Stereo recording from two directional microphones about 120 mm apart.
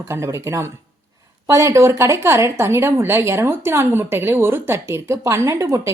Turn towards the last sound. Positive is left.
turn(degrees=-30)  # may be behind; listen again after turning